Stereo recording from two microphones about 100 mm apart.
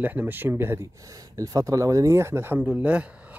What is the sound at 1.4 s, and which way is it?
Speech, 35° right (ahead or behind).